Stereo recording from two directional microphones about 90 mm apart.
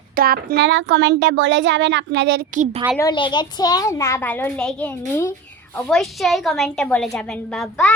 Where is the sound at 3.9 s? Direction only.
35° left (ahead or behind).